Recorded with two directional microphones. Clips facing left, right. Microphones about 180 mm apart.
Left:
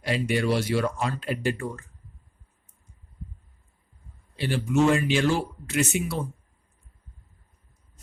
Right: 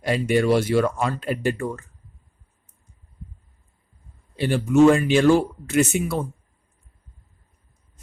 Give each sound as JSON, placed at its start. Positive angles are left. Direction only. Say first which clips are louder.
{"t": 0.0, "sound": "speech", "louder": "right 5 dB", "side_deg": -50}
{"t": 4.4, "sound": "speech", "louder": "right 7 dB", "side_deg": -50}